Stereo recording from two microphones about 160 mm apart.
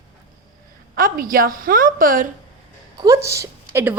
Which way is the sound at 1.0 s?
60° right (ahead or behind).